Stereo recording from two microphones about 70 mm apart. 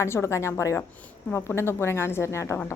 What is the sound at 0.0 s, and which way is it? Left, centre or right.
A woman's voice, left.